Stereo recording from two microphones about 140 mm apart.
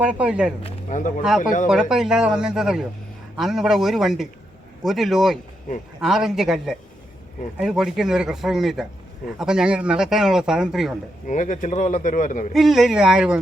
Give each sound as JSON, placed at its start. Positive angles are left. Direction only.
{"t": 0.0, "sound": "speech", "side_deg": -10}
{"t": 0.6, "sound": "speech", "side_deg": 60}
{"t": 1.6, "sound": "speech", "side_deg": -5}
{"t": 11.3, "sound": "speech", "side_deg": 65}
{"t": 12.5, "sound": "speech", "side_deg": 0}